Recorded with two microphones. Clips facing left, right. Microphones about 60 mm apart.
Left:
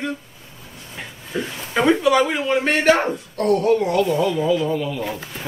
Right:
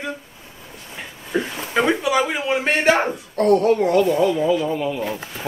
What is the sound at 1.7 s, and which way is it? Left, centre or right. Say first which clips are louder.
Speech: left 2 dB; centre.